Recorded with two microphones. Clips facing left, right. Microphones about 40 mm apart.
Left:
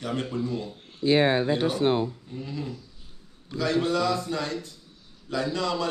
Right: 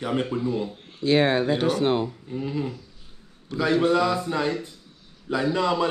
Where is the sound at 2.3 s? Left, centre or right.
Right.